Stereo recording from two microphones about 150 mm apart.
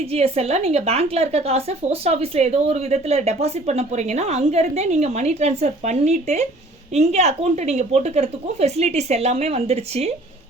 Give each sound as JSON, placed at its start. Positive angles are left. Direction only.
{"t": 0.0, "sound": "speech", "side_deg": -40}